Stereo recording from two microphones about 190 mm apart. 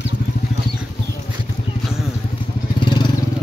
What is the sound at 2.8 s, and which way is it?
Vehicle, 25° left (ahead or behind).